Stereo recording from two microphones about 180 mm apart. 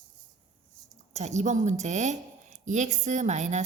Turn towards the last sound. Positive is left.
turn(degrees=-40)  # may be behind; listen again after turning